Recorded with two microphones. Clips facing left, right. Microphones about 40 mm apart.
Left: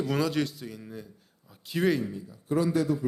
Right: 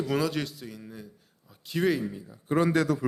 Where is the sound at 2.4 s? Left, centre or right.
Right.